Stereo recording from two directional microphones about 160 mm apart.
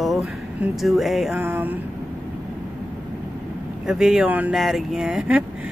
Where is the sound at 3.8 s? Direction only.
5° right (ahead or behind).